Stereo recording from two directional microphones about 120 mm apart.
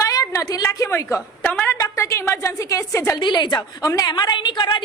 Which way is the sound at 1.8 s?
25° left (ahead or behind).